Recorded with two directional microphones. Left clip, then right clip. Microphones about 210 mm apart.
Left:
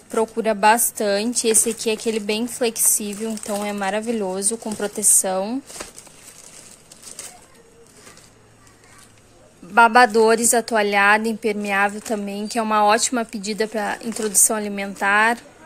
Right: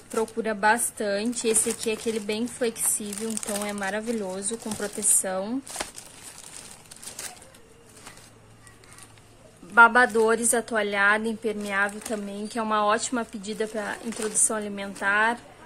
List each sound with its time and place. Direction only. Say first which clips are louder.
0.1 s a woman's voice: left 7 dB; 15° left (ahead or behind)
9.8 s a woman's voice: left 4 dB; 15° left (ahead or behind)